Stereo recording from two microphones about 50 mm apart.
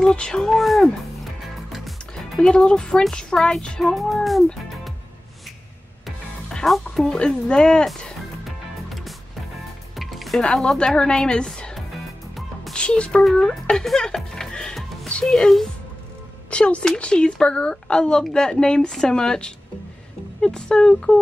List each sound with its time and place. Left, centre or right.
0.1 s speech: left
0.4 s speech: centre
2.5 s a woman's voice: centre
3.8 s speech: centre
6.6 s music: centre
7.1 s a woman's voice: centre
8.8 s music: centre
10.4 s a woman's voice: centre
12.7 s speech: left
13.4 s music: centre
15.2 s a woman's voice: centre
16.4 s a woman's voice: left